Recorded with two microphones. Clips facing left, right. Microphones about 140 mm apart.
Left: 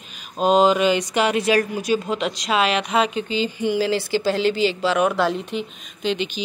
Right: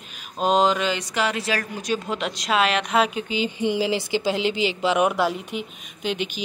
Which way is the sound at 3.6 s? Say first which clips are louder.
Left 2 dB; 20° right (ahead or behind).